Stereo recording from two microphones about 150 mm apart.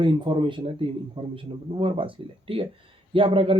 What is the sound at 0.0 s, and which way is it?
Speech, 35° right (ahead or behind).